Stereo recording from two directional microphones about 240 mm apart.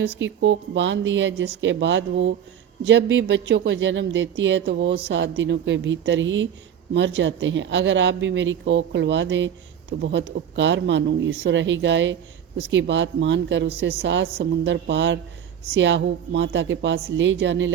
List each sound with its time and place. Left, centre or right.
0.0 s speech: right